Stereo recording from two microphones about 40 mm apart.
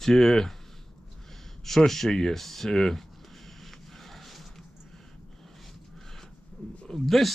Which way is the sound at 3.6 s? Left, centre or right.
Centre.